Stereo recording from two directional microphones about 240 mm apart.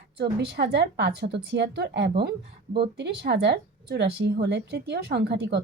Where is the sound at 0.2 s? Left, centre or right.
Right.